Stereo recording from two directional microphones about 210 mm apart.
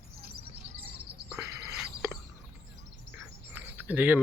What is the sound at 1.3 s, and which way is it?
Bird, 15° right (ahead or behind).